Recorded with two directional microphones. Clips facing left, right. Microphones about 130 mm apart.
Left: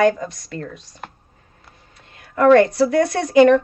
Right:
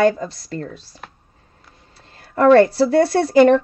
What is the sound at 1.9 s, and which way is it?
Speech, 35° right (ahead or behind).